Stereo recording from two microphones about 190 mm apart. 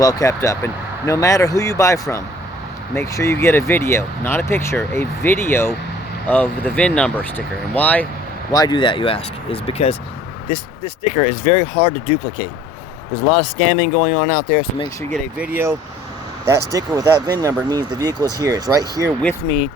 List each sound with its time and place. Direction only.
0.0 s speech: 15° left (ahead or behind)
8.5 s speech: 20° left (ahead or behind); by 14.6 s 40° left (ahead or behind)
15.1 s speech: 10° right (ahead or behind)